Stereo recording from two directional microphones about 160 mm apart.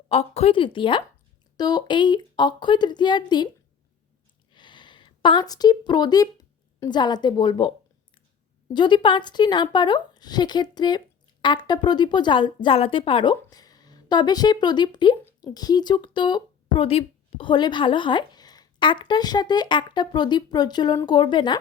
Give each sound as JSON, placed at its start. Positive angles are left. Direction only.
{"t": 0.1, "sound": "a woman's voice", "side_deg": 40}
{"t": 4.5, "sound": "a sound", "side_deg": 30}
{"t": 6.7, "sound": "speech", "side_deg": 25}
{"t": 8.7, "sound": "speech", "side_deg": 30}